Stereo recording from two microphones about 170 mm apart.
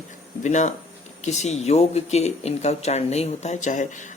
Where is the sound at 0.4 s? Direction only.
45° left (ahead or behind).